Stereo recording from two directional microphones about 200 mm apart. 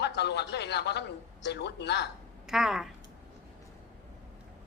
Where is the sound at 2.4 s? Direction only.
Centre (ahead or behind).